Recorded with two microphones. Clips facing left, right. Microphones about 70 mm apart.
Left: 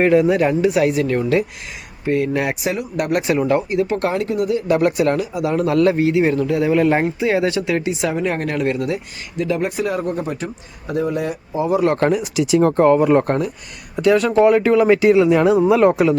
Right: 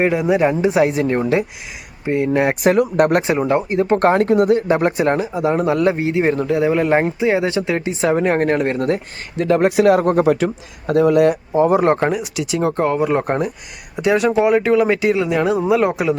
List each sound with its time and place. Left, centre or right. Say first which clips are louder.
0.0 s speech: left 1 dB; centre; by 2.6 s right
2.6 s speech: right 8 dB; right
3.2 s speech: even; right
4.7 s speech: even; right
9.4 s speech: right 5 dB; right
9.7 s speech: right 8 dB; right
11.5 s speech: even; right
12.1 s speech: left 5 dB; centre
13.2 s speech: even; right; by 16.1 s centre